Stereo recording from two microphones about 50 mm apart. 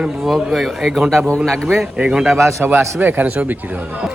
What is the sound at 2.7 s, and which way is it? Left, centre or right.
Speech, right.